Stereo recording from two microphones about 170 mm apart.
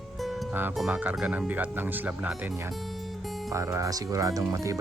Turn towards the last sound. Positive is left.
turn(degrees=-20)  # may be behind; listen again after turning